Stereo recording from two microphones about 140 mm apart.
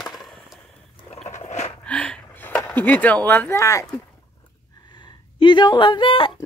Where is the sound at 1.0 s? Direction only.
50° left (ahead or behind).